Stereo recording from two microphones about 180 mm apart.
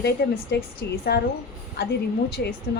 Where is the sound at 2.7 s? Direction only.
70° left (ahead or behind).